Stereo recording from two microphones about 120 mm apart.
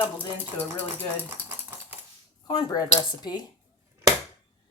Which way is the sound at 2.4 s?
35° left (ahead or behind).